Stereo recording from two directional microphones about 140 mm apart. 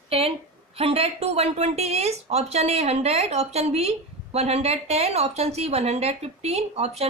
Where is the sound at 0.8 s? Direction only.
45° right (ahead or behind).